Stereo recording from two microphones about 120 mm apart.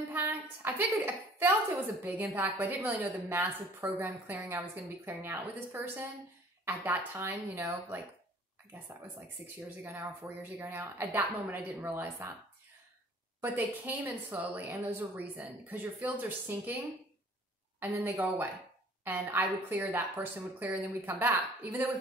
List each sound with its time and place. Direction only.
0.1 s a woman's voice: 15° right (ahead or behind)
9.8 s a woman's voice: 20° right (ahead or behind)
13.4 s speech: 15° right (ahead or behind)
17.7 s a woman's voice: 20° right (ahead or behind)